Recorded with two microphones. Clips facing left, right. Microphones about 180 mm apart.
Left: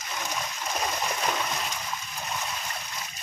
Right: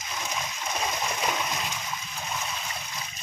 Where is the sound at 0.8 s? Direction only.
Centre (ahead or behind).